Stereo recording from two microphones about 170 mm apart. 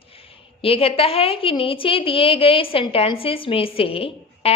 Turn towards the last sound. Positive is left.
turn(degrees=35)  # may be behind; listen again after turning